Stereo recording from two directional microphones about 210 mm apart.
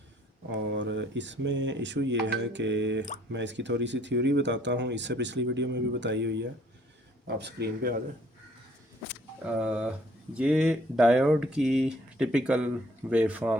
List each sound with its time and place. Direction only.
0.7 s speech: 55° right (ahead or behind)
9.4 s speech: 5° right (ahead or behind)